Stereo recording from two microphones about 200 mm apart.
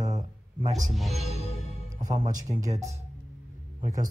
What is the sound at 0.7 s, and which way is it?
Speech, 40° right (ahead or behind).